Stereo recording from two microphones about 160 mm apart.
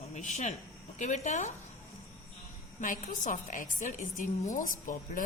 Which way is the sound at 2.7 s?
55° left (ahead or behind).